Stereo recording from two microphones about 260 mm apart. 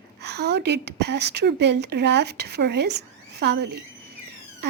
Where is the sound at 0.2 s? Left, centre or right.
Right.